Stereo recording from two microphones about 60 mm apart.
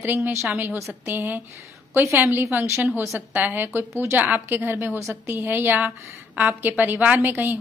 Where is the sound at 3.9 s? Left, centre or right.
Right.